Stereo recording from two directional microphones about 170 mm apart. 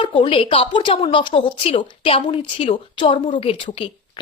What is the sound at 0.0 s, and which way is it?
A woman's voice, 30° left (ahead or behind).